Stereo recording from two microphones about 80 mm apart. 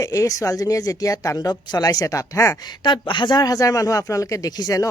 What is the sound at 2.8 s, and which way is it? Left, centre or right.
Speech, left.